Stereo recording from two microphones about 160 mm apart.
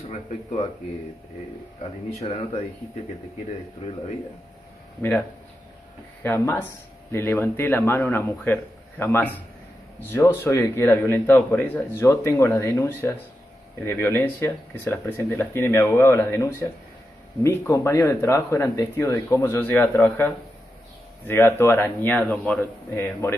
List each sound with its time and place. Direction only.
1.8 s speech: 40° left (ahead or behind)
5.0 s speech: 15° left (ahead or behind)
6.2 s speech: 15° left (ahead or behind)
17.4 s speech: 15° left (ahead or behind)
21.3 s speech: 15° left (ahead or behind)